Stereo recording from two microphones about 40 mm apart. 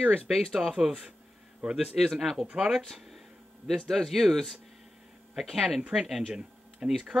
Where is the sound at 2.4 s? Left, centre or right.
Right.